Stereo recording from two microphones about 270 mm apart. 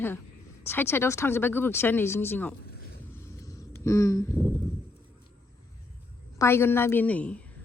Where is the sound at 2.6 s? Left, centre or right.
Left.